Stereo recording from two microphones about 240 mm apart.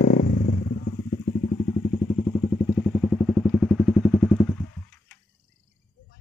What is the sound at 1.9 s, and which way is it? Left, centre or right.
Vehicle, centre.